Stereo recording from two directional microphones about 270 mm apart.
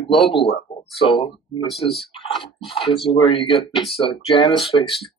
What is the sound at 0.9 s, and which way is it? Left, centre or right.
Speech, centre.